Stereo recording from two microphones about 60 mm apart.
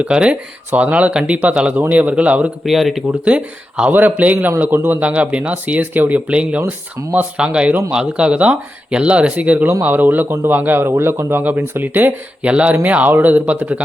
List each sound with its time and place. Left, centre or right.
0.0 s speech: centre
2.6 s speech: centre
3.1 s speech: centre
4.7 s speech: right
4.9 s speech: right
12.5 s speech: centre